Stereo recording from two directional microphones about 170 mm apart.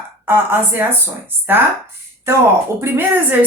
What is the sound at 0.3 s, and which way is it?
Speech, 10° right (ahead or behind).